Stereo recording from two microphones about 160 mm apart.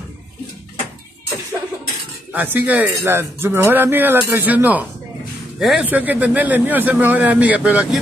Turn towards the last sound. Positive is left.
turn(degrees=-10)  # may be behind; listen again after turning